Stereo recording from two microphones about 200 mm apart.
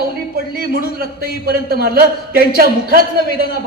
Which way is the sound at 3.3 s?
50° left (ahead or behind).